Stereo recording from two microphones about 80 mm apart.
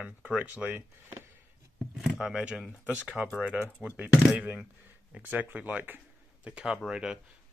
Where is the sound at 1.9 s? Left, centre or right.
Centre.